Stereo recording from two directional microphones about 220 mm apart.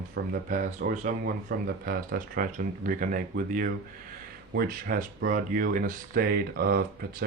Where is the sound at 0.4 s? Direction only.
35° right (ahead or behind).